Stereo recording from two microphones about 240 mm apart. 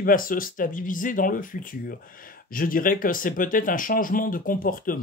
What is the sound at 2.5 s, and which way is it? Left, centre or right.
Speech, left.